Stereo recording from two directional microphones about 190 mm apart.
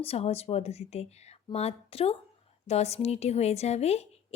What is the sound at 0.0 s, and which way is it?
A woman's voice, 30° left (ahead or behind).